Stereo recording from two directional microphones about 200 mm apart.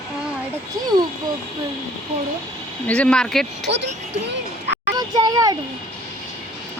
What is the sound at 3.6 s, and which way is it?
Speech, 60° right (ahead or behind).